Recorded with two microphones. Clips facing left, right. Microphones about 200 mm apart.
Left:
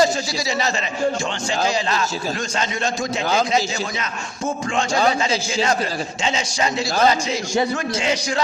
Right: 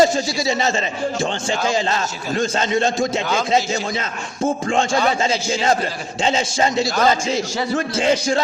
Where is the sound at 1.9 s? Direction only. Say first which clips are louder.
Right 1 dB; 30° right (ahead or behind).